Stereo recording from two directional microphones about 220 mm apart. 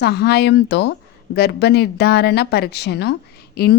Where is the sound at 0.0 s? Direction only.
50° left (ahead or behind).